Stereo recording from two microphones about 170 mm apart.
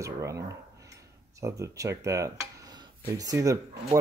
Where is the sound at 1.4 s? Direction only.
20° right (ahead or behind).